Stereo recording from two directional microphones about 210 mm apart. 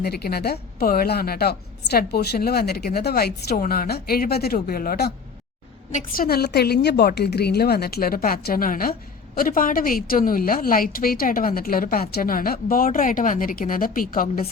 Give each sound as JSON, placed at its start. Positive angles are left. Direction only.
{"t": 0.0, "sound": "a woman's voice", "side_deg": 50}